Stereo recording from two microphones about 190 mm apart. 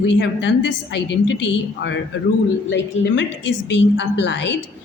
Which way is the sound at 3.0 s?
70° left (ahead or behind).